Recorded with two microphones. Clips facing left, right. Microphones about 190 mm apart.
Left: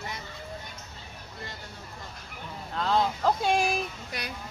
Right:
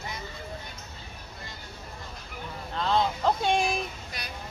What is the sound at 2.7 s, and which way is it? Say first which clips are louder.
Vehicle: even; 5° left (ahead or behind).